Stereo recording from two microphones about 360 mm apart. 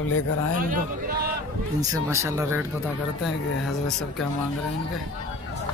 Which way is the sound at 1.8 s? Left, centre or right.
Centre.